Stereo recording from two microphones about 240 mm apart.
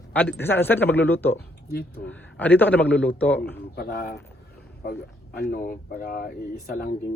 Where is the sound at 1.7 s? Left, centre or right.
Left.